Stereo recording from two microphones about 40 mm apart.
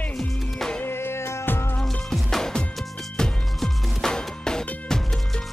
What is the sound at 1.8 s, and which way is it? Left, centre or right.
Music, centre.